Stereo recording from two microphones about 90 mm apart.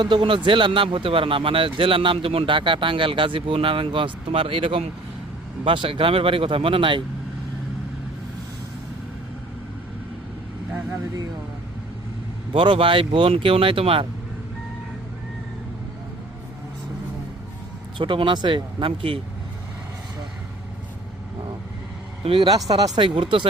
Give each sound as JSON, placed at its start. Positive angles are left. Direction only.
{"t": 0.0, "sound": "speech", "side_deg": -65}
{"t": 12.5, "sound": "speech", "side_deg": -85}
{"t": 17.9, "sound": "speech", "side_deg": -65}
{"t": 22.4, "sound": "speech", "side_deg": -50}
{"t": 23.0, "sound": "speech", "side_deg": -70}